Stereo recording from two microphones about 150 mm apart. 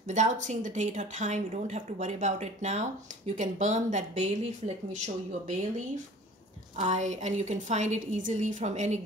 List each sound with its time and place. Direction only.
0.0 s speech: 50° right (ahead or behind)
6.8 s speech: 50° right (ahead or behind)